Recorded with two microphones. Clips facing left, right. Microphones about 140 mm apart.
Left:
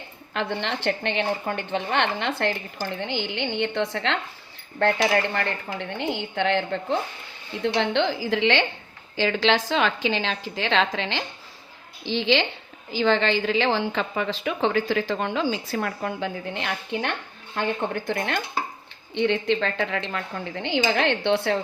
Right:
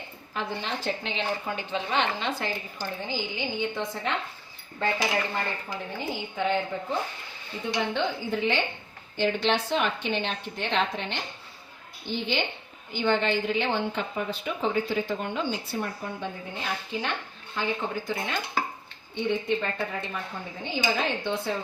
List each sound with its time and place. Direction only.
0.3 s a woman's voice: 70° left (ahead or behind)
4.8 s a woman's voice: 70° left (ahead or behind)
19.1 s a woman's voice: 90° left